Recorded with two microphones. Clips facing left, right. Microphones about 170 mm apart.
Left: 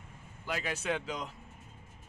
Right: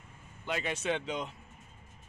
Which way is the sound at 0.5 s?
5° left (ahead or behind).